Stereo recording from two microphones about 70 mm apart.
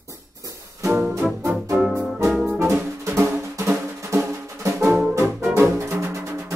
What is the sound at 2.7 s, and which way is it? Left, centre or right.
Music, right.